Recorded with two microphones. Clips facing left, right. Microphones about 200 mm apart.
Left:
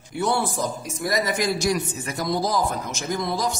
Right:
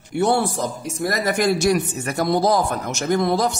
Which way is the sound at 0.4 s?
65° right (ahead or behind).